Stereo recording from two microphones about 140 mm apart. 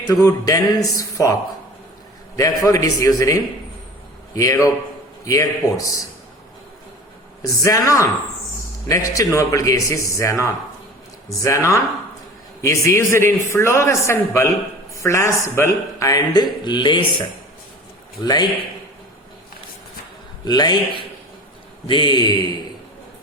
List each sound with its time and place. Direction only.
0.1 s speech: 25° left (ahead or behind)
4.4 s speech: 20° left (ahead or behind)
7.5 s a man's voice: 25° left (ahead or behind)
20.4 s a man's voice: 30° left (ahead or behind)
21.8 s a man's voice: 35° left (ahead or behind)